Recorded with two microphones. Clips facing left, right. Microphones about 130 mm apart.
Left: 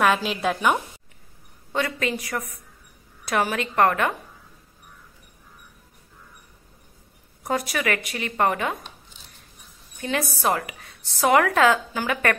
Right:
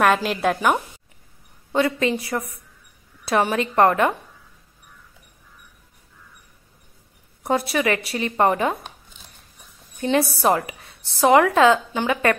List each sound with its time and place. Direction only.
0.4 s a woman's voice: centre (ahead or behind)
1.7 s a woman's voice: 30° right (ahead or behind)
7.4 s a woman's voice: 25° right (ahead or behind)
9.9 s a woman's voice: 30° right (ahead or behind)